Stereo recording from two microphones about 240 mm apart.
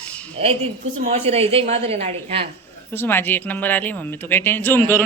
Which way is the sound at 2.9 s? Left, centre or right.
Centre.